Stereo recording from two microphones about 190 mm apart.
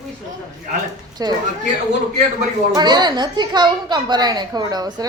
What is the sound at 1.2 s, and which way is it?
Speech, 20° right (ahead or behind).